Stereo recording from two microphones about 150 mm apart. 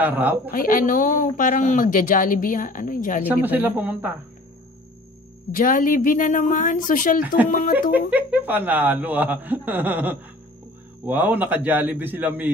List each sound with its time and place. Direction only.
0.0 s speech: 10° right (ahead or behind)
0.5 s speech: 70° left (ahead or behind)
3.3 s speech: 10° right (ahead or behind)
5.5 s speech: 70° left (ahead or behind)
7.9 s speech: 10° right (ahead or behind)